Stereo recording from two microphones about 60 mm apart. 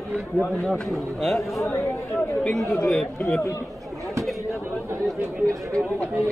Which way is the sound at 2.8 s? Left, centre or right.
Centre.